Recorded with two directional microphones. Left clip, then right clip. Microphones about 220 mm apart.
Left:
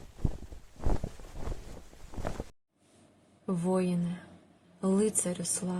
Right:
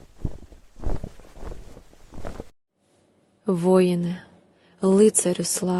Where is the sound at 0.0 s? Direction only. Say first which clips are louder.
Right 2 dB; centre (ahead or behind).